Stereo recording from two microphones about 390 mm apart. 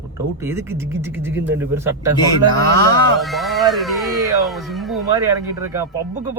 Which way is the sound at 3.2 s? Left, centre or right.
Centre.